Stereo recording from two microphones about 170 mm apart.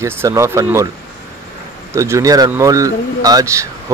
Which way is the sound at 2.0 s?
20° right (ahead or behind).